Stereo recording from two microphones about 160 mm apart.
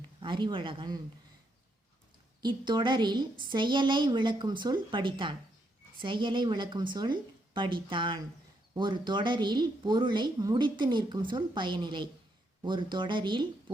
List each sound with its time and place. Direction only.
0.2 s a man's voice: 30° right (ahead or behind)
2.4 s a woman's voice: 25° right (ahead or behind)